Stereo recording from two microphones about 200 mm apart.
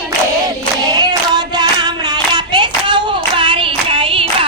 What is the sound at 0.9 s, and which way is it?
Clapping, 20° right (ahead or behind).